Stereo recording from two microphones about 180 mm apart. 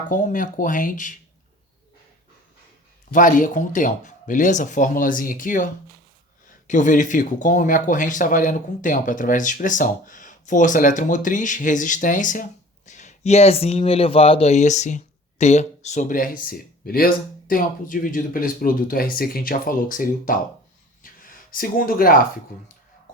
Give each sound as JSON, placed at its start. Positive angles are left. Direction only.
{"t": 0.1, "sound": "speech", "side_deg": 45}
{"t": 3.1, "sound": "speech", "side_deg": 45}